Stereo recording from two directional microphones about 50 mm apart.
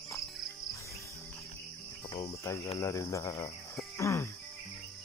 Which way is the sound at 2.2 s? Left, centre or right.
Left.